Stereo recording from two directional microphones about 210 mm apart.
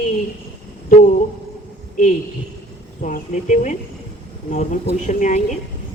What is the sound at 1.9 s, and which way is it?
Speech, 35° left (ahead or behind).